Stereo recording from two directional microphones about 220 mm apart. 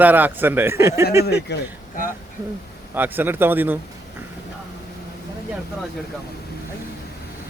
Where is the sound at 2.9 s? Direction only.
10° right (ahead or behind).